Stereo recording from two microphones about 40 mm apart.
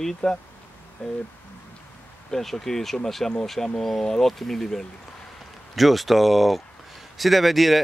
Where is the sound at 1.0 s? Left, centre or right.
Left.